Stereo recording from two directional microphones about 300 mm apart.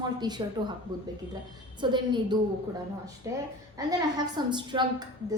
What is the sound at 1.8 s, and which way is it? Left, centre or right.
Speech, centre.